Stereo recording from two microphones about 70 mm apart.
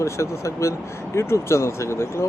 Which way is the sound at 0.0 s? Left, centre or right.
Left.